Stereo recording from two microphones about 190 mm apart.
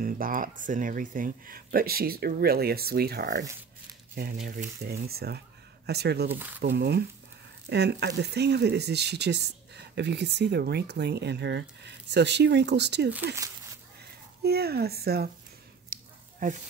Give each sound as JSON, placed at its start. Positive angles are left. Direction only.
{"t": 0.0, "sound": "speech", "side_deg": -45}
{"t": 13.1, "sound": "speech", "side_deg": -10}
{"t": 14.4, "sound": "speech", "side_deg": -55}
{"t": 15.9, "sound": "a sound", "side_deg": -45}